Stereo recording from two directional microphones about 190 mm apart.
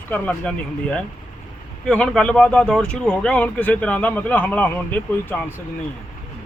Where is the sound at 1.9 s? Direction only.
5° left (ahead or behind).